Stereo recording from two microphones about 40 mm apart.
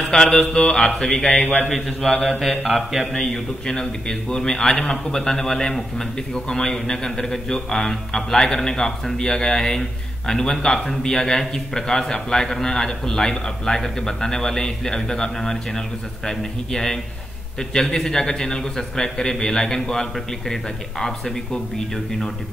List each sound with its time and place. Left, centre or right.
0.3 s a man's voice: centre
1.3 s a man's voice: left
1.7 s a man's voice: centre
2.4 s mantra: centre
3.1 s a man's voice: centre